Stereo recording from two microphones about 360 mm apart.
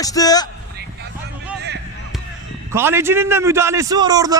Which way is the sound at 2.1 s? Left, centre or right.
Centre.